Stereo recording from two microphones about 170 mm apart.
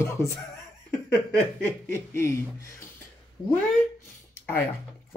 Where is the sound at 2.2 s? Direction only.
15° left (ahead or behind).